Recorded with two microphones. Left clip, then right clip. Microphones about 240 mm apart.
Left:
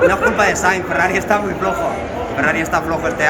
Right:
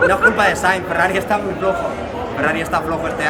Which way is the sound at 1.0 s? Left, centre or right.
Centre.